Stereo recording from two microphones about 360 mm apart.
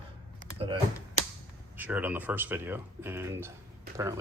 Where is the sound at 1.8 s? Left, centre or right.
Centre.